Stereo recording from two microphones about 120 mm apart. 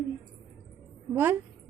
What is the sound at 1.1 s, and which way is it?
Speech, 15° right (ahead or behind).